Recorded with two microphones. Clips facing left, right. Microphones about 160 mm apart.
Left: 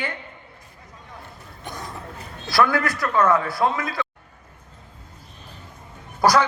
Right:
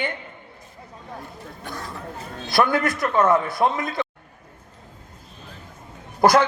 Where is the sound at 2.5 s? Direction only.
20° right (ahead or behind).